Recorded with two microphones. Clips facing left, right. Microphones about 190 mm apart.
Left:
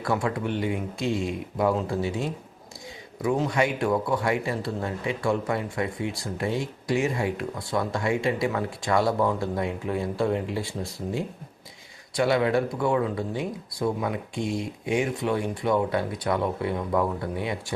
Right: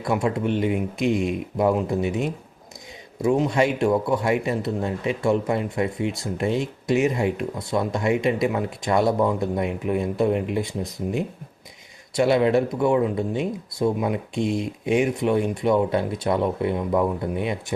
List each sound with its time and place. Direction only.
0.0 s a man's voice: 20° right (ahead or behind)